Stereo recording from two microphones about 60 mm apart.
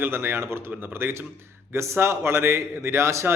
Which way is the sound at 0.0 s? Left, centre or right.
Right.